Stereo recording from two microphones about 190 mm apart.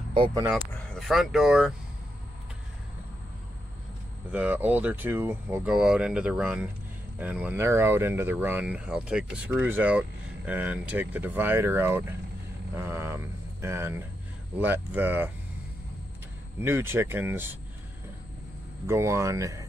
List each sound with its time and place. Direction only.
0.1 s speech: 25° right (ahead or behind)
0.5 s speech: centre (ahead or behind)
4.3 s speech: 10° right (ahead or behind)
16.6 s speech: 10° right (ahead or behind)
18.9 s speech: 15° right (ahead or behind)